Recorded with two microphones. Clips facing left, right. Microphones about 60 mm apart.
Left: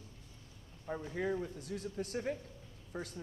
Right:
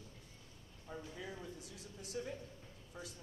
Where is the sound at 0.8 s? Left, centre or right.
Left.